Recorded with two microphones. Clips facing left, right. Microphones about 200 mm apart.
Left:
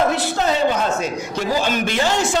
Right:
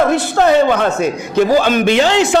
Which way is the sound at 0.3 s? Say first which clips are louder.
Right 9 dB; 65° right (ahead or behind).